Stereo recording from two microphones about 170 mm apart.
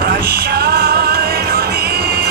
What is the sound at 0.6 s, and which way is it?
Music, 65° right (ahead or behind).